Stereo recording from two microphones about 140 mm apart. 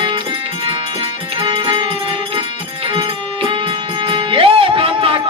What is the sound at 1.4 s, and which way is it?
Music, 40° right (ahead or behind).